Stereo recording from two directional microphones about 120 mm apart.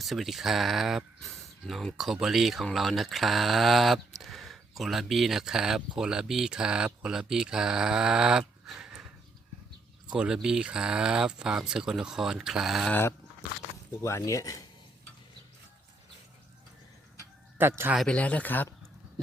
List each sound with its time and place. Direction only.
0.0 s speech: centre (ahead or behind)
10.1 s speech: 5° right (ahead or behind)
12.9 s speech: 20° left (ahead or behind)
17.2 s chicken: 20° right (ahead or behind)
17.9 s speech: 5° left (ahead or behind)